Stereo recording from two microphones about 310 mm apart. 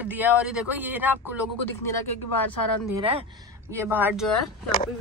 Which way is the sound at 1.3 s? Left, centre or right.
Left.